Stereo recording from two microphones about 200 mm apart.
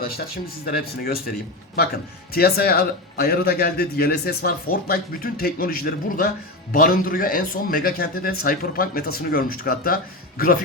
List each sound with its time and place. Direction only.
0.0 s a man's voice: 50° left (ahead or behind)
2.3 s a man's voice: 50° left (ahead or behind)